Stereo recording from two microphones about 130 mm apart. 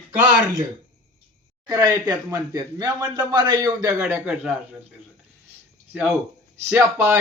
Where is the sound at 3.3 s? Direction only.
35° right (ahead or behind).